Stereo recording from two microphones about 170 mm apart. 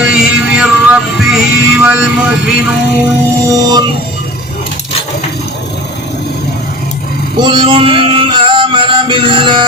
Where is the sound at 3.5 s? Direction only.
25° right (ahead or behind).